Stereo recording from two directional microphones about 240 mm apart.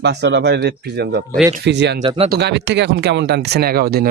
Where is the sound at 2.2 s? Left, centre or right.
Right.